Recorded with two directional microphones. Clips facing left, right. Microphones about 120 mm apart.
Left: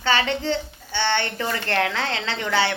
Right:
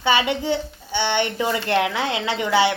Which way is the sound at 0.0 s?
15° right (ahead or behind).